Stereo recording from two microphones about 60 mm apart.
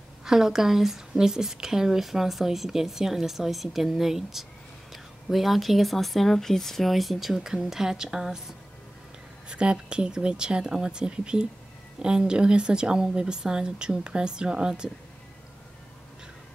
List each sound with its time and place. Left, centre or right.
0.2 s speech: centre